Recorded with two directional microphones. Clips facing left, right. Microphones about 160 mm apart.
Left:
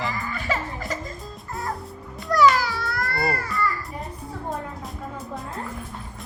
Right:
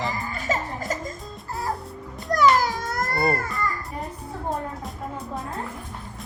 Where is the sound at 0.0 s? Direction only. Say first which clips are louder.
Even; 40° right (ahead or behind).